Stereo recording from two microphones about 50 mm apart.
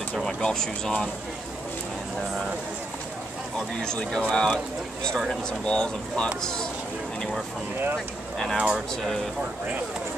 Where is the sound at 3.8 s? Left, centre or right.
Centre.